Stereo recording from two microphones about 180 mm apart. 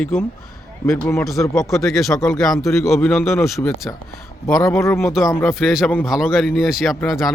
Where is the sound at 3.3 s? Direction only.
15° left (ahead or behind).